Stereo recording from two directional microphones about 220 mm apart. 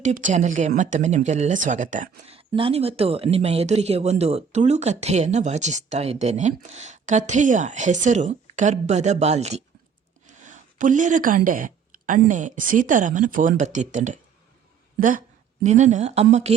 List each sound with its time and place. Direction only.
0.0 s speech: 35° right (ahead or behind)
15.6 s speech: 35° right (ahead or behind)